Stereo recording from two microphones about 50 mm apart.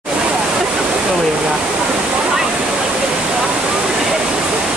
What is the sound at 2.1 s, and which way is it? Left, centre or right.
Waterfall, centre.